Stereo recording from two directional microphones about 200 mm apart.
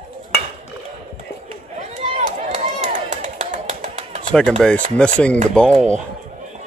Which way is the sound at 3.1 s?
35° right (ahead or behind).